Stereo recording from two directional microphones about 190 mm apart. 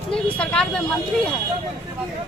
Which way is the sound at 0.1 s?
5° left (ahead or behind).